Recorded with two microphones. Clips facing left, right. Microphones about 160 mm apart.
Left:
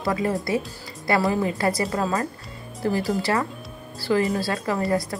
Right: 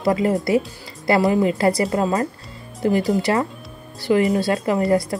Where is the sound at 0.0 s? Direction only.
25° right (ahead or behind).